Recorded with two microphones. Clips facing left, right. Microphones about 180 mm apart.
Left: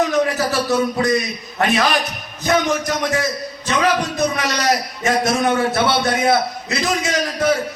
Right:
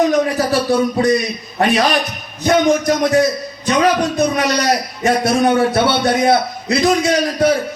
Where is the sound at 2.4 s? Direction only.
35° right (ahead or behind).